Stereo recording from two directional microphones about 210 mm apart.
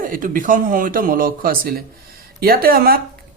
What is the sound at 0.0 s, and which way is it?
Speech, 40° right (ahead or behind).